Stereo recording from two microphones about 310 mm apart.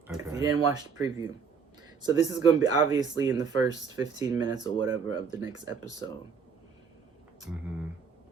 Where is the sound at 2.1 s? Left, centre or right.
Centre.